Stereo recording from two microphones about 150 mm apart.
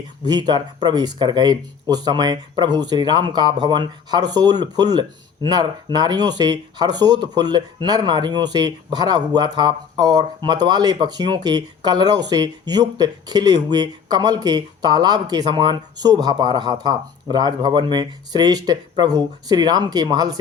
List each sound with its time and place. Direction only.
0.3 s speech: 30° right (ahead or behind)